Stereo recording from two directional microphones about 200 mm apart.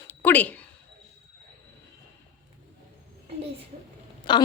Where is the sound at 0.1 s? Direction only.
10° left (ahead or behind).